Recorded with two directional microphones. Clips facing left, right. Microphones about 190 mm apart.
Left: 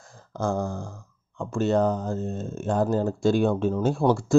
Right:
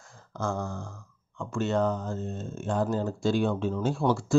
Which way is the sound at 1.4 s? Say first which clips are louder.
Left 4 dB; 35° left (ahead or behind).